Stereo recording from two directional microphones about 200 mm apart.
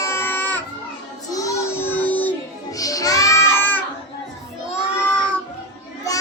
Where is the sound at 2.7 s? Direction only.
15° left (ahead or behind).